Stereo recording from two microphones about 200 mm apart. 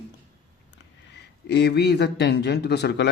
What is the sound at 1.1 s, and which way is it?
A man's voice, 60° left (ahead or behind).